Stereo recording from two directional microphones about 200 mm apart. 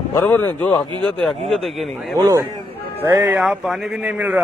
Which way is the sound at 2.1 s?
15° right (ahead or behind).